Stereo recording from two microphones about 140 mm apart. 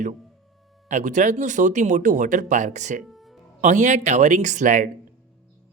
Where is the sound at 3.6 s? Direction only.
60° right (ahead or behind).